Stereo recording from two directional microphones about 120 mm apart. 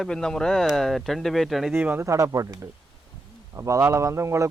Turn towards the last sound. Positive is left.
turn(degrees=-25)  # may be behind; listen again after turning